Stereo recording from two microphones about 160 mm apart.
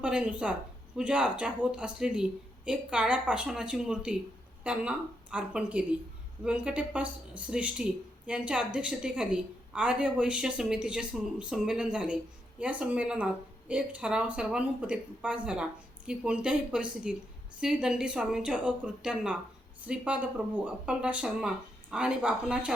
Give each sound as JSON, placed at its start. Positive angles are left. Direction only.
{"t": 0.0, "sound": "a woman's voice", "side_deg": -5}